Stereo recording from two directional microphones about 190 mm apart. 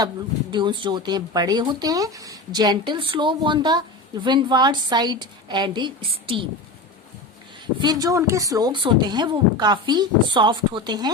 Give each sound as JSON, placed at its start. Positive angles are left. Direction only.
{"t": 0.5, "sound": "speech", "side_deg": -25}
{"t": 7.8, "sound": "speech", "side_deg": -20}